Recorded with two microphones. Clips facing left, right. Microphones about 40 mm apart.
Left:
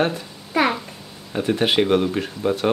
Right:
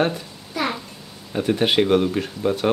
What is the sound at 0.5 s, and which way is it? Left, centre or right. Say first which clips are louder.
Speech: left 6 dB; left.